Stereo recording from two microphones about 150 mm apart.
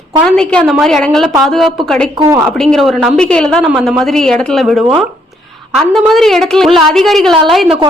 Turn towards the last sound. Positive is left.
turn(degrees=0)  # may be behind; listen again after turning